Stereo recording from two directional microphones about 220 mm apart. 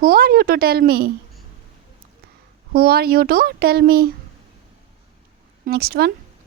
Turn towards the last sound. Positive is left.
turn(degrees=-45)  # may be behind; listen again after turning